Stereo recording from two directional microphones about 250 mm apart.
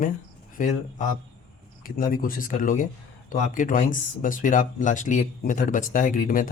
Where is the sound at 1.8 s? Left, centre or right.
Left.